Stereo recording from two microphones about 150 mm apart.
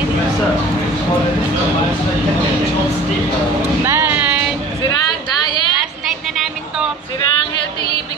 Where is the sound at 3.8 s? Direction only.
15° right (ahead or behind).